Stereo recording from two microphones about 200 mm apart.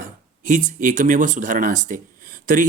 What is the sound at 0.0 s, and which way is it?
Speech, 40° right (ahead or behind).